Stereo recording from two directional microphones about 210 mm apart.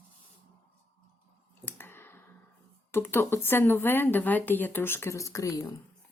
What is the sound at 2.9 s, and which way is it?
Speech, 10° left (ahead or behind).